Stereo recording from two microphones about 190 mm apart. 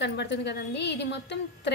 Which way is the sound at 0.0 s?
65° left (ahead or behind).